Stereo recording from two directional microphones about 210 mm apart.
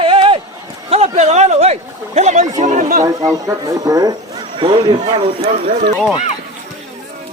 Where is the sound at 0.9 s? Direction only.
30° right (ahead or behind).